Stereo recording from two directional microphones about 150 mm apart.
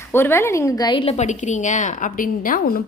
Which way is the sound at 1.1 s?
50° left (ahead or behind).